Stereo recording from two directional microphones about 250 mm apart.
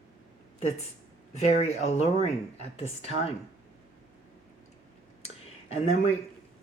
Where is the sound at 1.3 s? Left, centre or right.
Left.